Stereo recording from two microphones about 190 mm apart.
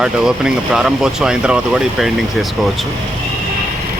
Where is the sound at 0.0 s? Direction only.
5° right (ahead or behind).